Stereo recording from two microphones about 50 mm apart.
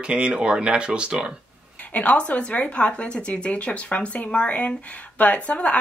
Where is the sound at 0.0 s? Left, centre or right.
Right.